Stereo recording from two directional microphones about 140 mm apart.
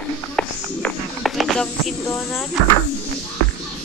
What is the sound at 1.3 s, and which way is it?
Snake, centre (ahead or behind).